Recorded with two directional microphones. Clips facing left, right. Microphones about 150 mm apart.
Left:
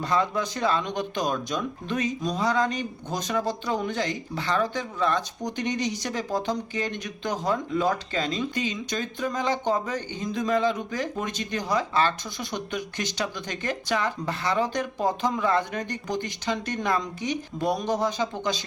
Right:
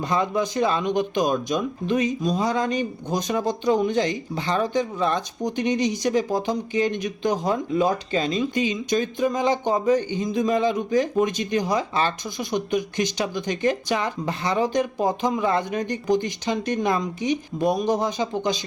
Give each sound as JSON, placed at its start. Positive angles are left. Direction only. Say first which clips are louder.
{"t": 0.0, "sound": "speech", "louder": "right 2 dB", "side_deg": -15}